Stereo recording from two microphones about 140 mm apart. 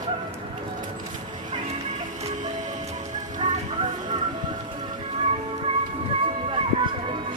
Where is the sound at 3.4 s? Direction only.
55° right (ahead or behind).